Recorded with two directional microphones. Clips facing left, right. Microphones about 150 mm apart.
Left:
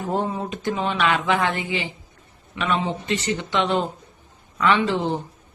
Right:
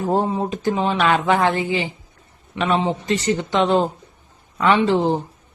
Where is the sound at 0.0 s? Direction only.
35° right (ahead or behind).